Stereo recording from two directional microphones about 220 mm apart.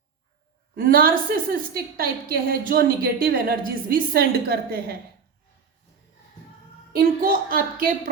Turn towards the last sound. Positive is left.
turn(degrees=-40)  # may be behind; listen again after turning